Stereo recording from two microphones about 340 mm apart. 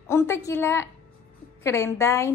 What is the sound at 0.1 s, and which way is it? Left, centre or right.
A woman's voice, centre.